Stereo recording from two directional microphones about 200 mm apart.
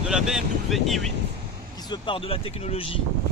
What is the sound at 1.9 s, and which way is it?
Speech, 25° left (ahead or behind).